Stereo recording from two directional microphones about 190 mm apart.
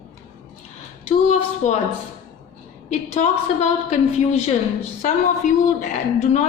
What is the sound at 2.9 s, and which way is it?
A woman's voice, 40° left (ahead or behind).